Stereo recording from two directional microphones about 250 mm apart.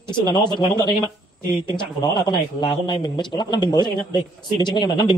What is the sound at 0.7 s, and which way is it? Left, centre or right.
Speech, centre.